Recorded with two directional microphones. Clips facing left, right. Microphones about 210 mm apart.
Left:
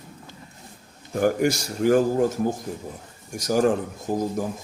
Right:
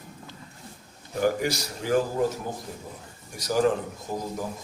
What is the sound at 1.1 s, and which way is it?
Speech, 50° left (ahead or behind).